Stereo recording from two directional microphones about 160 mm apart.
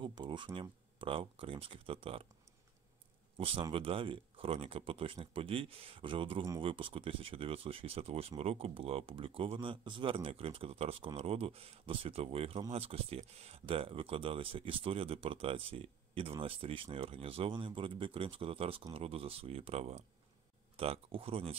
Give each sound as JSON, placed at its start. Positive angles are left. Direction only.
{"t": 0.0, "sound": "speech", "side_deg": -30}
{"t": 3.3, "sound": "speech", "side_deg": -35}